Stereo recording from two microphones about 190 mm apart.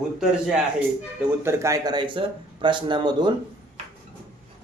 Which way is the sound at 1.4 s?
15° right (ahead or behind).